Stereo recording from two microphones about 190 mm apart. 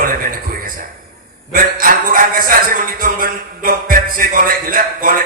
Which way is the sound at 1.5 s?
50° right (ahead or behind).